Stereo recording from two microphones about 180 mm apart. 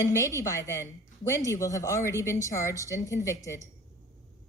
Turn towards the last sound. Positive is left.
turn(degrees=15)  # may be behind; listen again after turning